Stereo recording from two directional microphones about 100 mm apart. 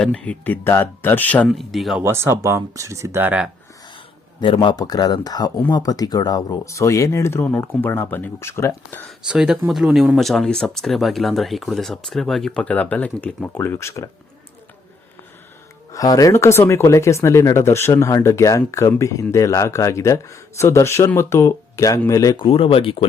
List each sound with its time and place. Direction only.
0.0 s speech: 10° left (ahead or behind)
1.5 s speech: centre (ahead or behind)
2.0 s speech: 25° right (ahead or behind)
3.2 s speech: 10° right (ahead or behind)
3.9 s a man's voice: 60° left (ahead or behind); by 6.6 s 40° left (ahead or behind)
6.7 s speech: 30° left (ahead or behind)
9.2 s speech: 10° right (ahead or behind)
10.2 s speech: 5° left (ahead or behind); by 14.1 s 30° left (ahead or behind)
15.9 s a man's voice: 35° left (ahead or behind)
22.4 s speech: 65° left (ahead or behind)